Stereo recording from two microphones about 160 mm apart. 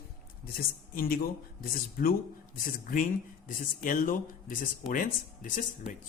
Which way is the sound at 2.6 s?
55° left (ahead or behind).